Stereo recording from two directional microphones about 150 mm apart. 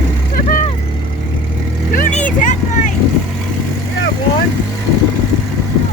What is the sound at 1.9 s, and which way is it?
Vehicle, 60° left (ahead or behind).